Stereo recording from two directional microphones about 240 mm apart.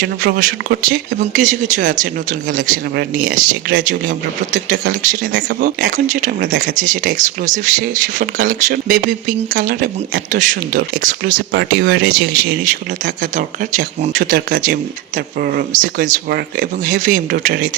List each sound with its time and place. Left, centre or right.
0.2 s speech: right